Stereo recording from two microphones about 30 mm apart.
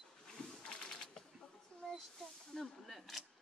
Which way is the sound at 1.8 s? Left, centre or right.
Centre.